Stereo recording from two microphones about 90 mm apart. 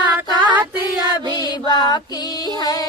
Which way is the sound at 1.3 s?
50° left (ahead or behind).